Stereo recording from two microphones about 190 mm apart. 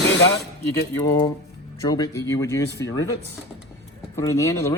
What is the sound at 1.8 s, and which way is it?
Speech, 20° left (ahead or behind).